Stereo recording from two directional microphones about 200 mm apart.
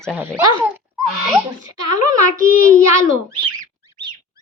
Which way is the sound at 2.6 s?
15° right (ahead or behind).